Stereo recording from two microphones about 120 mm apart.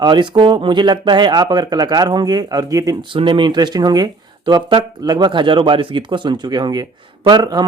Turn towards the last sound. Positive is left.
turn(degrees=-35)  # may be behind; listen again after turning